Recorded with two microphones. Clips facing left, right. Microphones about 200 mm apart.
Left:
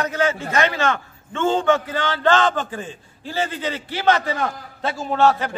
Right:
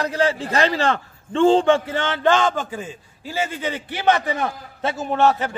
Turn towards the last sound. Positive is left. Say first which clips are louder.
# even
turn(degrees=-20)  # may be behind; listen again after turning